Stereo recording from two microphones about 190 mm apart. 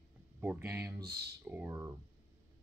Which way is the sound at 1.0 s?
55° right (ahead or behind).